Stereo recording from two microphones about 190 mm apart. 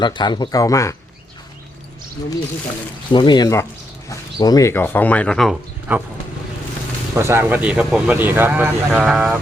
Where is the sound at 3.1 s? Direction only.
25° left (ahead or behind); by 5.5 s centre (ahead or behind).